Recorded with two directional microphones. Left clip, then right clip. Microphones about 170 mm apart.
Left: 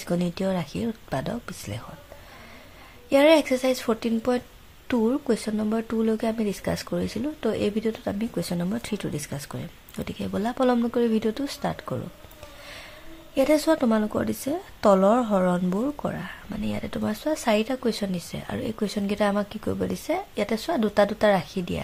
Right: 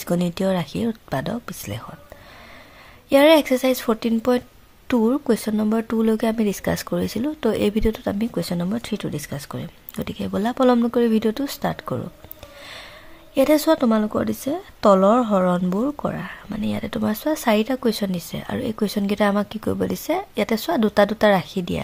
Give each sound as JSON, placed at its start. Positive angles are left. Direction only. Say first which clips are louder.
{"t": 0.0, "sound": "a woman's voice", "louder": "right 4 dB", "side_deg": -25}
{"t": 3.1, "sound": "a woman's voice", "louder": "right 4 dB", "side_deg": -25}
{"t": 13.3, "sound": "a woman's voice", "louder": "right 4 dB", "side_deg": -25}